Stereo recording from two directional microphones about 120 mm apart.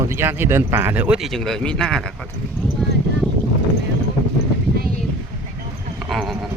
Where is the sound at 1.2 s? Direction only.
Centre (ahead or behind).